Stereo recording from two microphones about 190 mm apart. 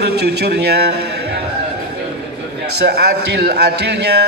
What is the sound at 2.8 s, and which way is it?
A man's voice, 60° right (ahead or behind).